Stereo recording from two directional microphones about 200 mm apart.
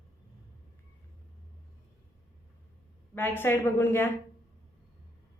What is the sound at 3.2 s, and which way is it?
Speech, 10° left (ahead or behind).